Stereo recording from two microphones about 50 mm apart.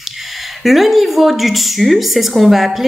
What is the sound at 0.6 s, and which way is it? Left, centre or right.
A woman's voice, centre.